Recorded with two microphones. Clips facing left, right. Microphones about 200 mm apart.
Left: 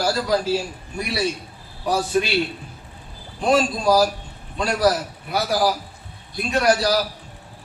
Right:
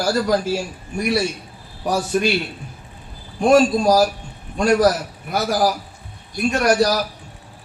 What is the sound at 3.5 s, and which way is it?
A man's voice, 45° right (ahead or behind).